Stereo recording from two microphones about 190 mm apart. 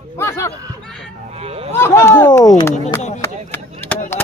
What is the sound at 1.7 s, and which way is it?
Speech, 15° left (ahead or behind).